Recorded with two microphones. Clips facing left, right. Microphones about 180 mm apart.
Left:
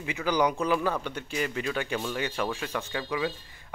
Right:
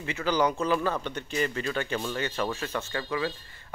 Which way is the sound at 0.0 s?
10° left (ahead or behind).